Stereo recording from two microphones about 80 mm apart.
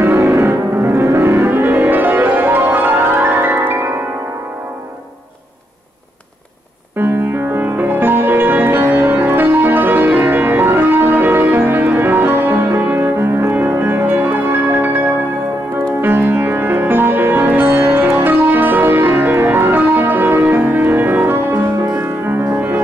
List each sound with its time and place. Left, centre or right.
0.0 s music: right
7.0 s music: right